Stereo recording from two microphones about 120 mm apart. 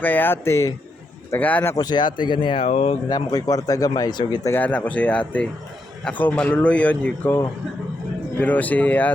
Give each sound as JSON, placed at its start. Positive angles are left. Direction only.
{"t": 0.0, "sound": "speech", "side_deg": 15}
{"t": 1.7, "sound": "speech", "side_deg": 35}
{"t": 2.6, "sound": "speech", "side_deg": 65}
{"t": 3.1, "sound": "speech", "side_deg": 35}
{"t": 4.5, "sound": "speech", "side_deg": 15}
{"t": 8.4, "sound": "speech", "side_deg": 15}